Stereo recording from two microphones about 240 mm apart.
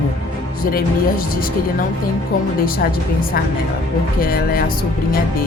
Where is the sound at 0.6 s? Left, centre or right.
Left.